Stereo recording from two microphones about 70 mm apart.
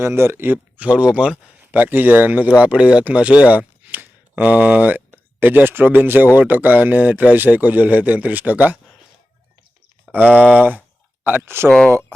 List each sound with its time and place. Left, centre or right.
0.0 s speech: right
10.2 s speech: centre
10.6 s speech: right